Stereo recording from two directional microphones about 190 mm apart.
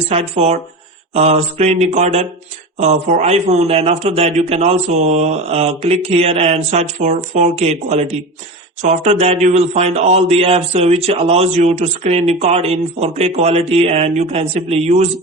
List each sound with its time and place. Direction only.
0.1 s speech: 35° right (ahead or behind)